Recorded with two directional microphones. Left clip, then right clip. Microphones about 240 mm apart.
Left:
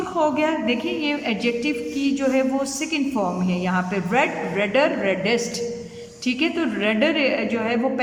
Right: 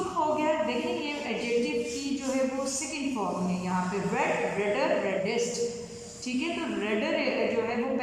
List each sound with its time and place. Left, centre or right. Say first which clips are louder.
4.7 s a woman's voice: left 8 dB; left